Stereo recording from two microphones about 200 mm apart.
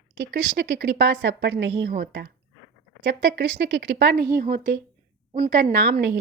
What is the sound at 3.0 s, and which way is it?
Speech, 60° right (ahead or behind).